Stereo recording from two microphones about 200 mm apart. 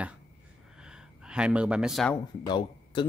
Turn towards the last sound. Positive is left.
turn(degrees=25)  # may be behind; listen again after turning